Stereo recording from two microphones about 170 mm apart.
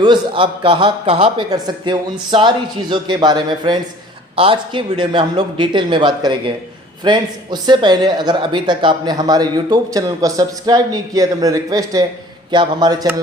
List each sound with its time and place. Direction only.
0.0 s a man's voice: 30° right (ahead or behind)